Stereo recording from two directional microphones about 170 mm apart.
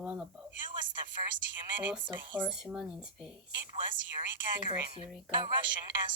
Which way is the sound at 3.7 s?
30° right (ahead or behind).